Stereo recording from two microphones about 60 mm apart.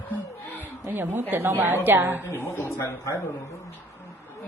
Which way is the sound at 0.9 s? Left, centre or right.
Right.